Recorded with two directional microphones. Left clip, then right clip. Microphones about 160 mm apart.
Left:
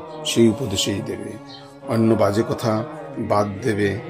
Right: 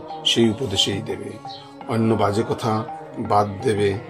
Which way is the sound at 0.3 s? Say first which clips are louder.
Left 1 dB; 65° left (ahead or behind).